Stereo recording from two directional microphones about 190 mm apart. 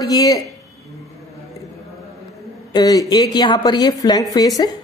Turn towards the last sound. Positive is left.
turn(degrees=20)  # may be behind; listen again after turning